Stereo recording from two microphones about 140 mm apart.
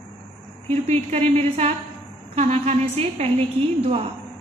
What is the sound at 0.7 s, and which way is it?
A woman's voice, 50° right (ahead or behind).